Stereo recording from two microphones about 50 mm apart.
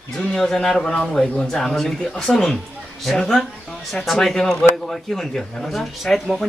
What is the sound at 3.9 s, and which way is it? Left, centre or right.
A man's voice, centre.